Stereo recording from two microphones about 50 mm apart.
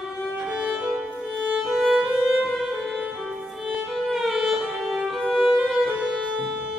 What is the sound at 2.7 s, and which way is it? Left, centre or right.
Music, centre.